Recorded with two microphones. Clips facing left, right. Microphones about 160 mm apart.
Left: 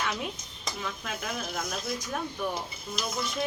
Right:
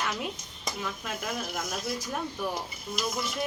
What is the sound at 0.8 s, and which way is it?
Speech, 5° right (ahead or behind).